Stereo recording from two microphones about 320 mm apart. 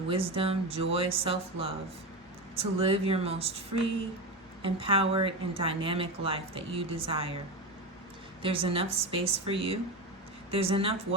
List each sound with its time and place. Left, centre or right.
0.1 s speech: centre
8.4 s speech: centre